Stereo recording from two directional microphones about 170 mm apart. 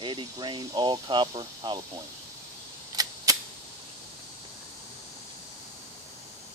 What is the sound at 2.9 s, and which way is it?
Cap gun, 20° right (ahead or behind).